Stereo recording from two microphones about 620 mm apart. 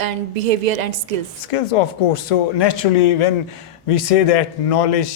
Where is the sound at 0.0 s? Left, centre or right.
Right.